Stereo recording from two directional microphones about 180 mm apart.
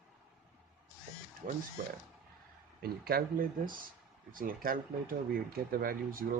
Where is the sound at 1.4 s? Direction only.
50° right (ahead or behind).